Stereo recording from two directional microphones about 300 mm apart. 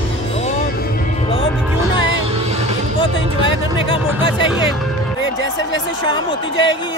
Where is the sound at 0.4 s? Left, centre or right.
Left.